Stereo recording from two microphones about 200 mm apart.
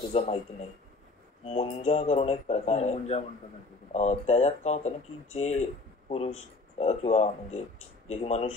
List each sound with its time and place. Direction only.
0.1 s speech: 30° left (ahead or behind)